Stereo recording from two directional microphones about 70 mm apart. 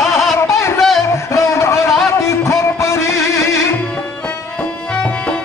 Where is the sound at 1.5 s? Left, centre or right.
Left.